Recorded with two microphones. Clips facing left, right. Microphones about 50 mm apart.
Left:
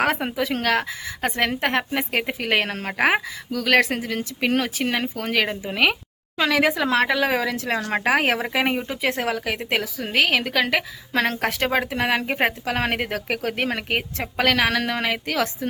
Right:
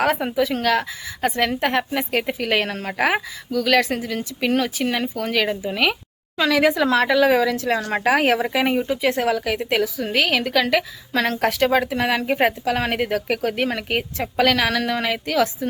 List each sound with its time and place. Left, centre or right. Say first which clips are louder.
0.0 s a woman's voice: right 2 dB; left
8.5 s a woman's voice: right 3 dB; left
12.6 s a woman's voice: right 2 dB; left